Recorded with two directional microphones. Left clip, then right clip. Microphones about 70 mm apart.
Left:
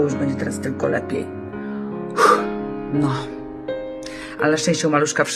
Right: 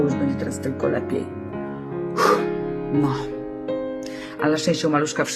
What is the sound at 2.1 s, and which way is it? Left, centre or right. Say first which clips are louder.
Music: left 4 dB; right.